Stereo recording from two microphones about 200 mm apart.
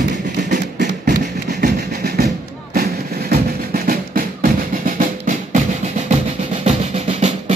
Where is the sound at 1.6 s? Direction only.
50° right (ahead or behind).